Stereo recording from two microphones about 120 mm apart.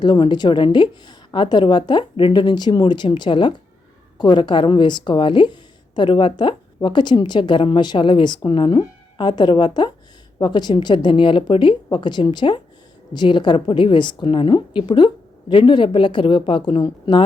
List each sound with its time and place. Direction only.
0.0 s a woman's voice: 40° left (ahead or behind)